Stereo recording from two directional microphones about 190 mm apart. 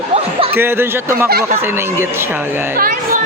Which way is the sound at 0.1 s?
30° right (ahead or behind).